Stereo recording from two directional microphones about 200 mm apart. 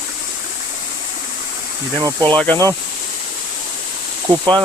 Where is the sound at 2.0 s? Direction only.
20° right (ahead or behind).